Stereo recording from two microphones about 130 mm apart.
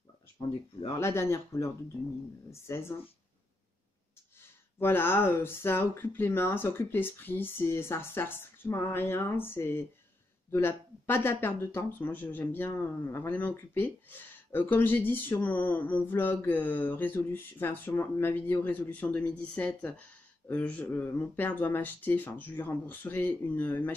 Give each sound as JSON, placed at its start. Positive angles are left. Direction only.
{"t": 0.8, "sound": "speech", "side_deg": 20}
{"t": 4.4, "sound": "speech", "side_deg": 15}